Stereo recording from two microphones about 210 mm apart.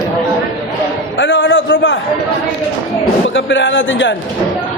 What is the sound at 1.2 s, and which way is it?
Speech, 65° left (ahead or behind).